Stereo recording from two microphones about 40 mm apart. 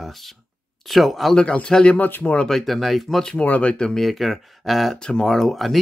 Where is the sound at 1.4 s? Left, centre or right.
Left.